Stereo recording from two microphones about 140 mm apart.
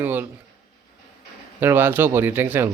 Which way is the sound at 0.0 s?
15° right (ahead or behind).